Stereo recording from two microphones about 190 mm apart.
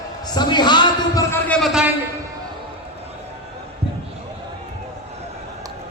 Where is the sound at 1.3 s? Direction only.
5° left (ahead or behind).